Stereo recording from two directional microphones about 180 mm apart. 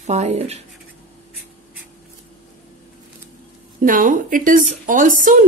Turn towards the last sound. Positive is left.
turn(degrees=-45)  # may be behind; listen again after turning